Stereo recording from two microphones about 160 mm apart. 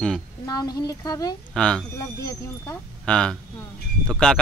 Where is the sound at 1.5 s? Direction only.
5° left (ahead or behind).